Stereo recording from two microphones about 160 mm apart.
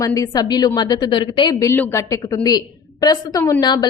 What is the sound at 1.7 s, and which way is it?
A woman's voice, 15° left (ahead or behind).